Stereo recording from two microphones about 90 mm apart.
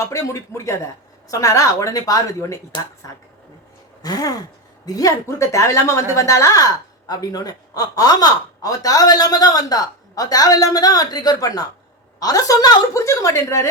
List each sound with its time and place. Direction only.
0.1 s a woman's voice: 35° left (ahead or behind)
4.0 s a woman's voice: 45° left (ahead or behind)